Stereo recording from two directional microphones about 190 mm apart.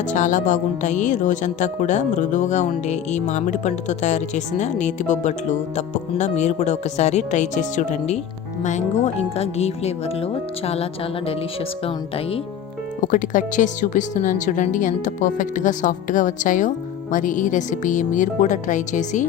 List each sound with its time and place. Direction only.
0.0 s speech: 40° left (ahead or behind)
13.0 s speech: 45° left (ahead or behind)